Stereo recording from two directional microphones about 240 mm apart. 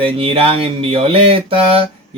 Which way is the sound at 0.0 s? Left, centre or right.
Right.